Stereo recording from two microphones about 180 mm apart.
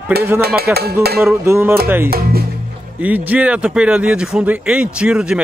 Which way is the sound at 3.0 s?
10° right (ahead or behind).